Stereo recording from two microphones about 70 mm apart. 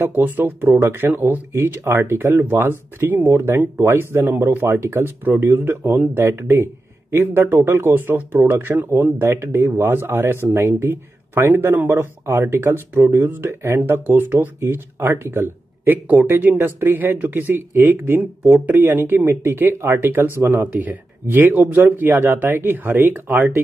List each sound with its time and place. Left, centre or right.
0.0 s speech: right
6.2 s speech: right
9.2 s speech: right